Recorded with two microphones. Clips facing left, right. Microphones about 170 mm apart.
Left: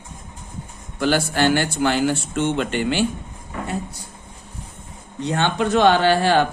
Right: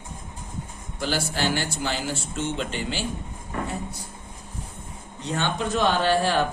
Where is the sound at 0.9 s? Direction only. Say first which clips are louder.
Left 7 dB; 65° left (ahead or behind).